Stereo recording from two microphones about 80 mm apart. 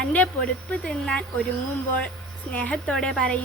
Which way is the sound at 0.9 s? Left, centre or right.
Centre.